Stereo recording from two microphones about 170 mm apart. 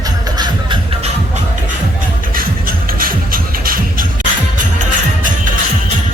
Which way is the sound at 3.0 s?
55° right (ahead or behind).